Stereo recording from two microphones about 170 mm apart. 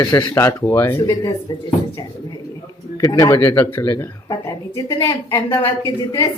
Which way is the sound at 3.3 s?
10° left (ahead or behind).